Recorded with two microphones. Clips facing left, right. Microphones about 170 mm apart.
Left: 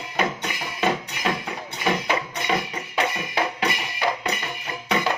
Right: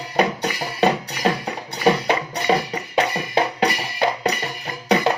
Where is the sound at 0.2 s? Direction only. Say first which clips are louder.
Right 6 dB; 35° right (ahead or behind).